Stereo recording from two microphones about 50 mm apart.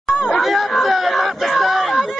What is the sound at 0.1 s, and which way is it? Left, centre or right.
Chatter, centre.